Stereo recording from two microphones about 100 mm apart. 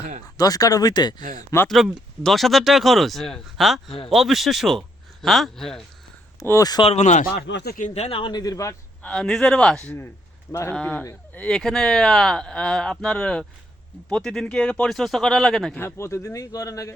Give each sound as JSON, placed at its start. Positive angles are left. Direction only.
{"t": 0.3, "sound": "a man's voice", "side_deg": 35}
{"t": 1.6, "sound": "speech", "side_deg": 0}
{"t": 6.6, "sound": "a man's voice", "side_deg": 40}
{"t": 7.9, "sound": "speech", "side_deg": 90}
{"t": 8.2, "sound": "a man's voice", "side_deg": 45}
{"t": 9.0, "sound": "speech", "side_deg": 10}
{"t": 10.5, "sound": "speech", "side_deg": 30}
{"t": 10.8, "sound": "speech", "side_deg": 10}
{"t": 15.8, "sound": "a man's voice", "side_deg": 25}